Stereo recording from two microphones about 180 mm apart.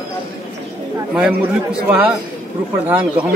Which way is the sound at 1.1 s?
5° right (ahead or behind).